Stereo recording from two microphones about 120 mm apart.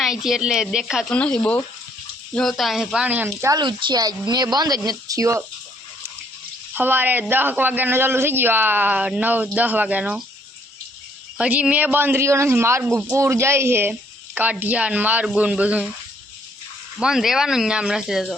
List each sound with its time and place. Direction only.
0.0 s speech: 5° right (ahead or behind)
1.1 s speech: 10° left (ahead or behind)
2.3 s speech: centre (ahead or behind); by 3.6 s 25° right (ahead or behind)
3.6 s speech: 40° right (ahead or behind)
6.7 s a man's voice: 15° right (ahead or behind)
11.3 s a man's voice: 10° right (ahead or behind)
17.0 s speech: 5° right (ahead or behind)